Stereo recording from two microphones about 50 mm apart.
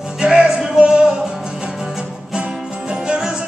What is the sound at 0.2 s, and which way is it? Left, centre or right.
Music, centre.